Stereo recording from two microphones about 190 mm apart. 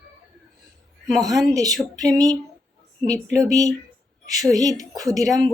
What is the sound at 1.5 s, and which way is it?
Speech, 20° right (ahead or behind).